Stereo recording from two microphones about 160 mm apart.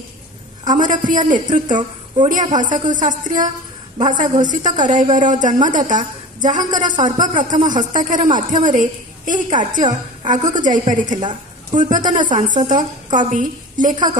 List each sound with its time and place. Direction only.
0.7 s a woman's voice: 55° right (ahead or behind)